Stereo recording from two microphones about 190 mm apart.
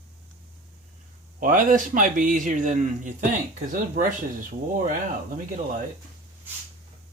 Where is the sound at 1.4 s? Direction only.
45° right (ahead or behind).